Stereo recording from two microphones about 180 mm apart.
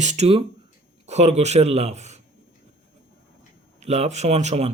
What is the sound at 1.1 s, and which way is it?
Speech, 40° right (ahead or behind).